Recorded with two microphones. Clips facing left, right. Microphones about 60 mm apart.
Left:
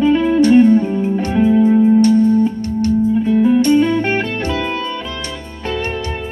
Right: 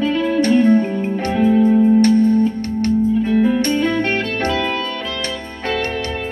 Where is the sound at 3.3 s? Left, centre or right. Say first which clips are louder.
Left 5 dB; right.